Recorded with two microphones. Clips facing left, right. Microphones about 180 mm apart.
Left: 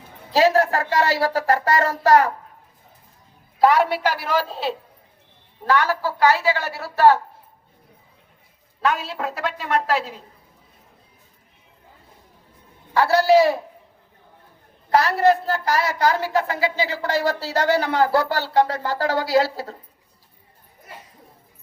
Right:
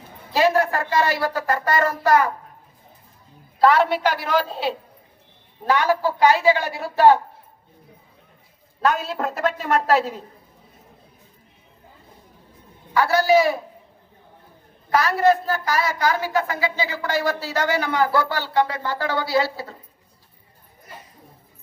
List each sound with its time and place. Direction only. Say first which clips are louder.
0.3 s a woman's voice: left 2 dB; 35° left (ahead or behind)
3.6 s a woman's voice: even; 15° left (ahead or behind)
5.6 s a woman's voice: right 1 dB; 15° right (ahead or behind)
8.8 s a woman's voice: right 2 dB; 40° right (ahead or behind)
12.9 s a man's voice: left 2 dB; 30° left (ahead or behind)
14.9 s a woman's voice: left 1 dB; 30° left (ahead or behind)